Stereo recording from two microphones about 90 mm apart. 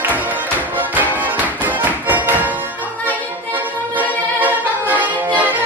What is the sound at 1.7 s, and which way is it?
Music, 20° right (ahead or behind).